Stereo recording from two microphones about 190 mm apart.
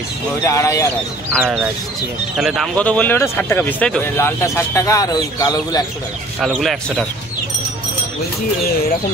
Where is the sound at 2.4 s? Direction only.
Centre (ahead or behind); by 5.8 s 20° left (ahead or behind).